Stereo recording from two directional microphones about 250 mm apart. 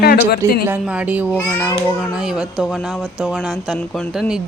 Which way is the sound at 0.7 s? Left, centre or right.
Centre.